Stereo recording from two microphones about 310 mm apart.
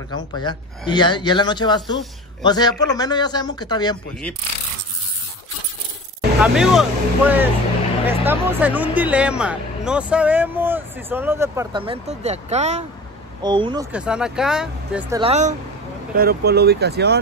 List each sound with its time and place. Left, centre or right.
0.1 s a man's voice: centre
6.4 s speech: centre
13.9 s speech: centre
16.2 s speech: right